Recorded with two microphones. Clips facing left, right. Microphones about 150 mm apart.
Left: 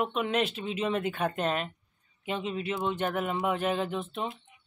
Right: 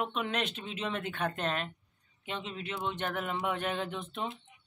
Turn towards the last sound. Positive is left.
turn(degrees=5)  # may be behind; listen again after turning